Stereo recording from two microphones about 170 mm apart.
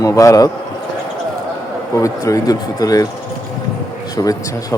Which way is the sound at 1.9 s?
20° left (ahead or behind).